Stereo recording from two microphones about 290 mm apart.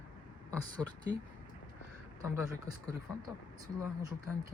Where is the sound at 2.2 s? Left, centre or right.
Centre.